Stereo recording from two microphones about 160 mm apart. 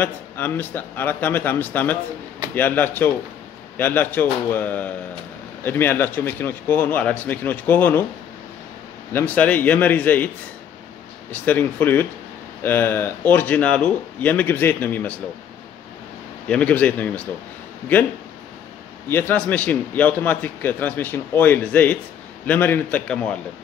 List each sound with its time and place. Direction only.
0.0 s a man's voice: 10° left (ahead or behind)
9.1 s a man's voice: 10° left (ahead or behind)
11.3 s a man's voice: 10° left (ahead or behind)
16.4 s a man's voice: 10° left (ahead or behind)
19.0 s a man's voice: 15° left (ahead or behind)